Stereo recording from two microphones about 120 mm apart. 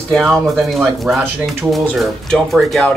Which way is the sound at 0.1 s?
5° left (ahead or behind).